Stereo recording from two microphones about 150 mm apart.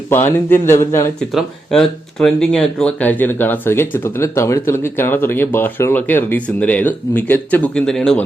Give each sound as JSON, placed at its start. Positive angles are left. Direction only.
{"t": 0.1, "sound": "speech", "side_deg": 15}
{"t": 1.3, "sound": "speech", "side_deg": 0}